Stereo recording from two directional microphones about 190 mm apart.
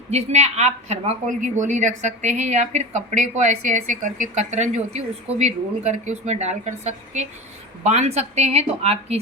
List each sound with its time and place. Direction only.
0.1 s a woman's voice: 35° right (ahead or behind)